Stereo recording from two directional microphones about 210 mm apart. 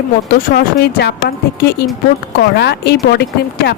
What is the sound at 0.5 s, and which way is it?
Speech, 50° left (ahead or behind).